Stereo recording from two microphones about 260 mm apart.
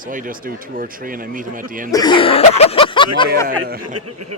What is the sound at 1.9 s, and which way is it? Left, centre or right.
Cough, centre.